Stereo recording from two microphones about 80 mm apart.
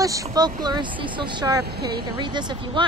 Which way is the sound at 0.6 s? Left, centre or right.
Right.